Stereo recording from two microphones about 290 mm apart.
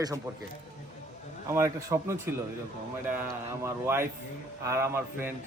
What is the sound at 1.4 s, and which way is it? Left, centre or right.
A man's voice, centre.